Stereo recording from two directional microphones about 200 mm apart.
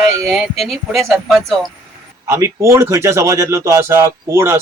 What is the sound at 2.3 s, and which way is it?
Speech, 15° right (ahead or behind).